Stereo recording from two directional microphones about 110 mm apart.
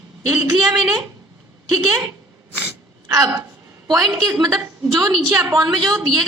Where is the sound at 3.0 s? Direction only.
30° right (ahead or behind).